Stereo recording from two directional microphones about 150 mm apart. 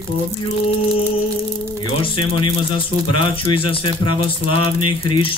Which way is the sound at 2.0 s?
35° left (ahead or behind).